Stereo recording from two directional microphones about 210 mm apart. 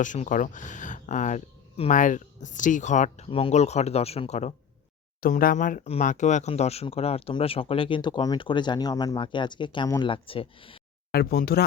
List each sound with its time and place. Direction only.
0.0 s speech: 35° left (ahead or behind)
5.2 s speech: 45° left (ahead or behind); by 10.8 s 25° left (ahead or behind)
11.1 s speech: 45° left (ahead or behind)